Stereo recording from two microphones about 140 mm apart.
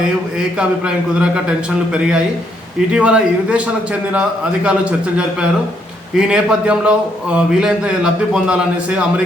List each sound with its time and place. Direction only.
0.3 s a man's voice: 5° right (ahead or behind)
4.6 s a man's voice: 5° right (ahead or behind)